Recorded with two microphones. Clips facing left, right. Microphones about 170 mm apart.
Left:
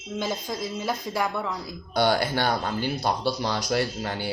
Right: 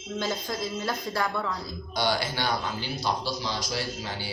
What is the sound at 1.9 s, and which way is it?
Speech, 55° left (ahead or behind).